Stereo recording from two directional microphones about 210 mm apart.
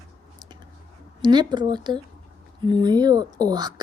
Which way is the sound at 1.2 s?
20° right (ahead or behind).